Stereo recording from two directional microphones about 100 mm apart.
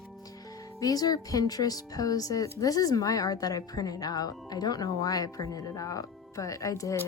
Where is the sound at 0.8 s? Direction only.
35° left (ahead or behind).